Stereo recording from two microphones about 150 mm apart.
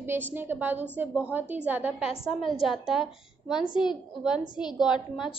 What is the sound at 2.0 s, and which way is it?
Speech, 40° left (ahead or behind).